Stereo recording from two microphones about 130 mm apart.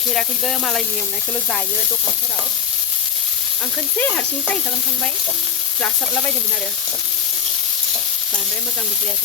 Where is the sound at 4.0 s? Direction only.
15° left (ahead or behind).